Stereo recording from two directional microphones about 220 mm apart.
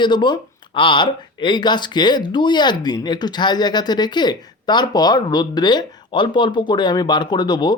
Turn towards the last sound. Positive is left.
turn(degrees=20)  # may be behind; listen again after turning